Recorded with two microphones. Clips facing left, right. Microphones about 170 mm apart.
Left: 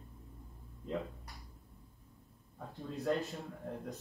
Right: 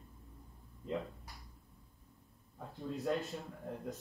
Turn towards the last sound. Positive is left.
turn(degrees=0)  # may be behind; listen again after turning